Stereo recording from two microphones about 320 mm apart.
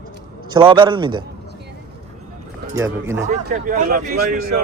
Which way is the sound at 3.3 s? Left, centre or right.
Right.